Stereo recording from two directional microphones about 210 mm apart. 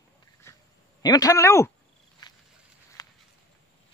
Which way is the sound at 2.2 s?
20° left (ahead or behind).